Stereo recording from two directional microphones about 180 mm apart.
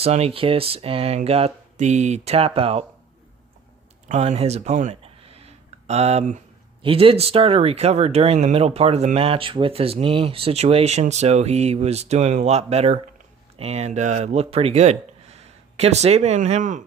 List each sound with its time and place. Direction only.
0.0 s speech: 35° right (ahead or behind)
4.1 s speech: 40° right (ahead or behind)